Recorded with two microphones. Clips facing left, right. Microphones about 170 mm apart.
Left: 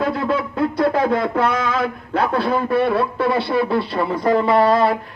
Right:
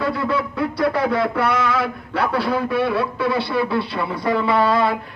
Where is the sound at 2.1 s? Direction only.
45° left (ahead or behind).